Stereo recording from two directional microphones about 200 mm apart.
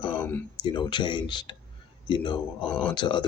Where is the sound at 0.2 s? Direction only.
10° left (ahead or behind).